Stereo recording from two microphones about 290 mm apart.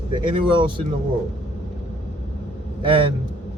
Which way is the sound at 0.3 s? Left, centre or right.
Centre.